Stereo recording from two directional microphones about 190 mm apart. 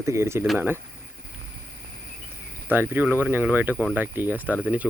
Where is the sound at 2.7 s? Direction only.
10° right (ahead or behind).